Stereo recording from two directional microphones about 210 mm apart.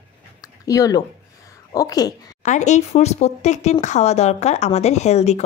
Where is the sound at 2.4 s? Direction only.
35° left (ahead or behind).